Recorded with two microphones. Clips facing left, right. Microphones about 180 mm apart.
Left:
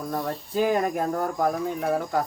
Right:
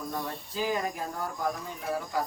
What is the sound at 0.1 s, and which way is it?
Speech, 55° left (ahead or behind).